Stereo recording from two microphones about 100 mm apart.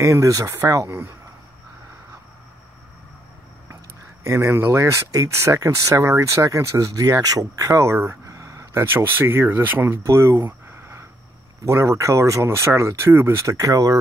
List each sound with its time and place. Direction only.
0.0 s speech: 30° right (ahead or behind)
4.3 s speech: 30° right (ahead or behind)